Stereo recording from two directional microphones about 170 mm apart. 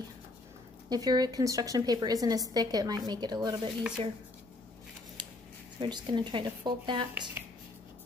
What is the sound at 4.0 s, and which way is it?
Speech, 35° right (ahead or behind).